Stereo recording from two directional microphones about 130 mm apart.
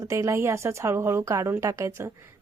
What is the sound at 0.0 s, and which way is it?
A woman's voice, 25° right (ahead or behind).